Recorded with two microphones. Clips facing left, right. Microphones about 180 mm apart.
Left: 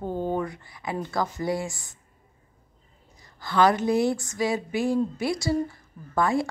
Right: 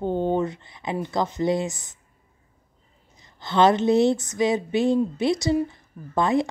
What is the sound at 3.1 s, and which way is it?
A woman's voice, 20° right (ahead or behind).